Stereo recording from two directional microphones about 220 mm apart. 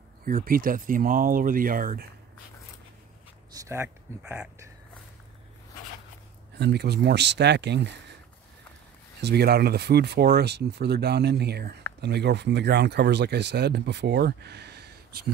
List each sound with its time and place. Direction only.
0.5 s speech: 40° right (ahead or behind)
3.5 s speech: 15° right (ahead or behind)
6.6 s speech: 50° right (ahead or behind)
9.2 s speech: 45° right (ahead or behind)